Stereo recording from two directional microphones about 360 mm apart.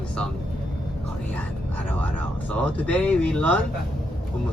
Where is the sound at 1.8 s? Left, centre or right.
Centre.